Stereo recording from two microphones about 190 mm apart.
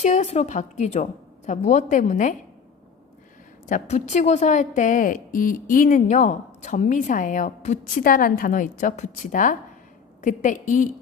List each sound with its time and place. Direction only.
0.0 s a woman's voice: 40° left (ahead or behind)
3.7 s a woman's voice: 40° left (ahead or behind)